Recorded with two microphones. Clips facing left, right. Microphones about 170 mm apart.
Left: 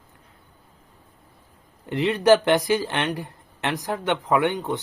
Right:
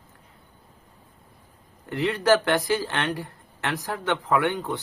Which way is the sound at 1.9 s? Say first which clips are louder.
Left 3 dB; 20° left (ahead or behind).